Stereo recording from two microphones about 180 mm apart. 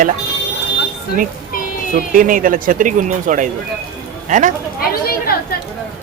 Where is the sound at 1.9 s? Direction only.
50° right (ahead or behind).